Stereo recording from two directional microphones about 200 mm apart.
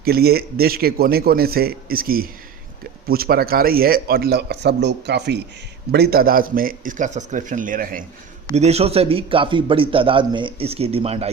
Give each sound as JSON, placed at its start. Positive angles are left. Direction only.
{"t": 0.0, "sound": "speech", "side_deg": -50}
{"t": 8.5, "sound": "a man's voice", "side_deg": -30}